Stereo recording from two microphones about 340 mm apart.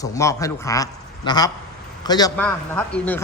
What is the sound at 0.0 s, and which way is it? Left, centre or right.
A man's voice, centre.